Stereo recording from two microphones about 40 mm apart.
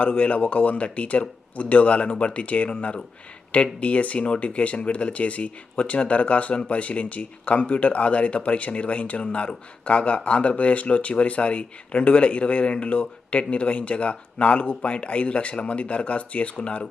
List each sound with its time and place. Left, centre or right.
0.0 s speech: left